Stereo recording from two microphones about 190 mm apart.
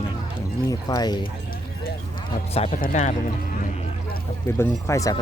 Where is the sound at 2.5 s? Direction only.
30° left (ahead or behind).